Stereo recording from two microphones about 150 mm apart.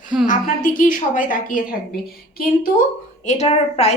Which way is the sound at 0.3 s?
65° left (ahead or behind).